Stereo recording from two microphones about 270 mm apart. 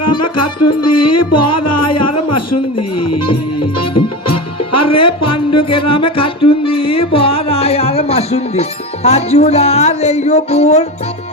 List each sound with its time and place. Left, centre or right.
0.0 s music: left
4.9 s speech: left
5.5 s speech: centre